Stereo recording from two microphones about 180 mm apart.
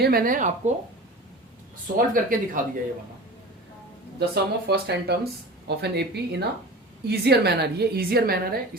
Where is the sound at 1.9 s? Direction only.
50° right (ahead or behind).